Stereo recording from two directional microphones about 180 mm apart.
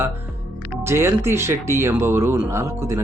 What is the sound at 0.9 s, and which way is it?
A man's voice, 15° right (ahead or behind).